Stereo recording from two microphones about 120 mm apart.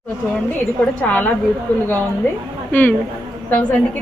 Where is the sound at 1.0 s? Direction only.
15° left (ahead or behind).